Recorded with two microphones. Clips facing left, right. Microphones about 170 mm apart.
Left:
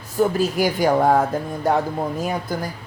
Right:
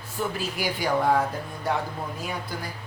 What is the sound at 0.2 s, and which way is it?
Speech, 45° left (ahead or behind).